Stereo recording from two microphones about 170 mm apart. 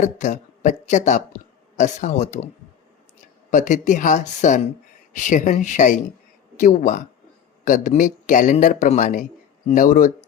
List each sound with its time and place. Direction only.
0.0 s a man's voice: 45° left (ahead or behind)
3.5 s a man's voice: 45° left (ahead or behind)